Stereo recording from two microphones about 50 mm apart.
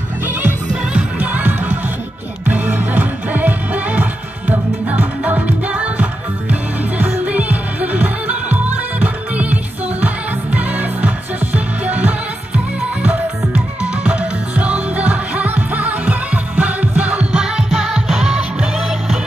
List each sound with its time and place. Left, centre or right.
0.3 s music: right
0.9 s music: right
7.1 s music: right
17.3 s music: centre